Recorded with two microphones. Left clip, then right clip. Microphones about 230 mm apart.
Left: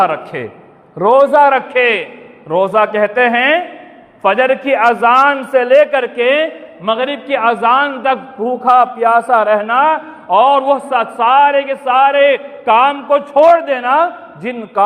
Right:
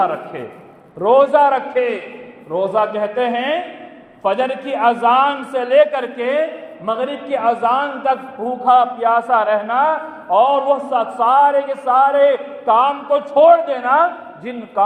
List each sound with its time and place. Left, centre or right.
0.0 s a man's voice: left
11.3 s a man's voice: left
12.6 s a man's voice: left